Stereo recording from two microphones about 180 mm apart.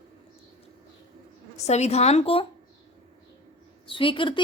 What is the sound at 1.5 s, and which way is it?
Speech, 40° left (ahead or behind).